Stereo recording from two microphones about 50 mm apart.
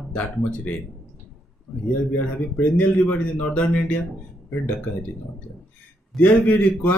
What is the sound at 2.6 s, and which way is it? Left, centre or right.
A man's voice, left.